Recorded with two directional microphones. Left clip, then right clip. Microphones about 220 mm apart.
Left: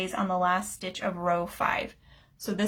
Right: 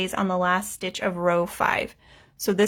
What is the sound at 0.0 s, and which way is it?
Speech, 40° right (ahead or behind).